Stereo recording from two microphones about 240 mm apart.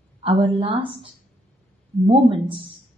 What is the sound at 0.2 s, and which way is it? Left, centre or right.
Speech, right.